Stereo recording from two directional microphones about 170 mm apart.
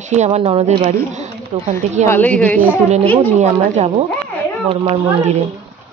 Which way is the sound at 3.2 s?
45° right (ahead or behind).